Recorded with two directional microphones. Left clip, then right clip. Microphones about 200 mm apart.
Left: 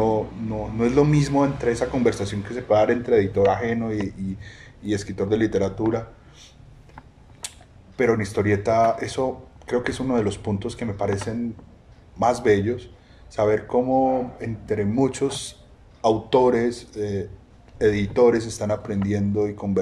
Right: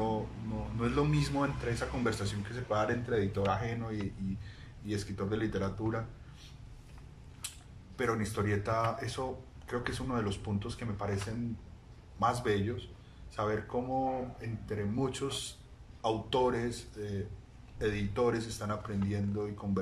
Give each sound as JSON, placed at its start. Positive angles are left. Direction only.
{"t": 0.7, "sound": "a man's voice", "side_deg": 30}
{"t": 7.4, "sound": "speech", "side_deg": 30}
{"t": 12.2, "sound": "a man's voice", "side_deg": 30}